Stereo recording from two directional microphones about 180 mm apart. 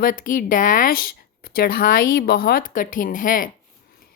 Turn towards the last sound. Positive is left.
turn(degrees=50)  # may be behind; listen again after turning